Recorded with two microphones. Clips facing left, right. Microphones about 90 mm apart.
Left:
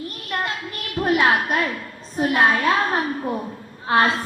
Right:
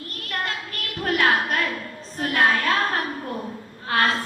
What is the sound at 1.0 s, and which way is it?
A woman's voice, 20° left (ahead or behind).